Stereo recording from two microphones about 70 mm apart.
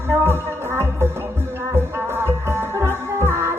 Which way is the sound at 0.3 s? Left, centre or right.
Right.